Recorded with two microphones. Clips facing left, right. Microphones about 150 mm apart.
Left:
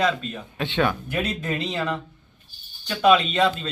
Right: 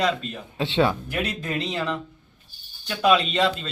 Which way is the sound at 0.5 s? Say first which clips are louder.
Right 2 dB; 25° right (ahead or behind).